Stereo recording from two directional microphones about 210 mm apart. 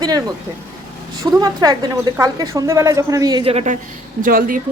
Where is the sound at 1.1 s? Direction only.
20° right (ahead or behind).